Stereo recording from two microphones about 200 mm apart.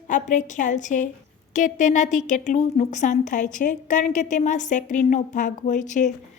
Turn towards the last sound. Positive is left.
turn(degrees=40)  # may be behind; listen again after turning